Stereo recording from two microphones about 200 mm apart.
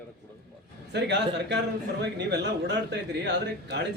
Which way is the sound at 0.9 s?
60° right (ahead or behind).